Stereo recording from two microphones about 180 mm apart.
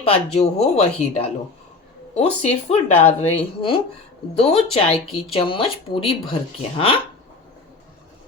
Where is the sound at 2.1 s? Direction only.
35° left (ahead or behind).